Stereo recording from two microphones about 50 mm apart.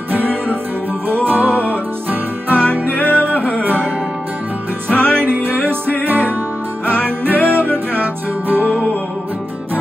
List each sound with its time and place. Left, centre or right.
1.2 s music: right
2.5 s music: left
4.8 s music: left
5.2 s music: right
7.4 s music: right